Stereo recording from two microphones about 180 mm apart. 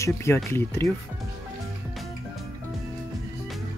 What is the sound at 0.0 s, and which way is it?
Speech, 15° left (ahead or behind).